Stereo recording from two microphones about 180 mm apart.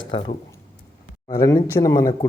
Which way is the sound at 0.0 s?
25° left (ahead or behind).